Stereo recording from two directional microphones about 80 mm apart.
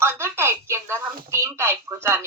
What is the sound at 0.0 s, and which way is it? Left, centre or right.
Speech, right.